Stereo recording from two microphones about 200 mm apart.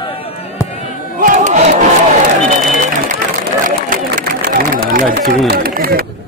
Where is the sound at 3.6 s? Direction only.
40° right (ahead or behind).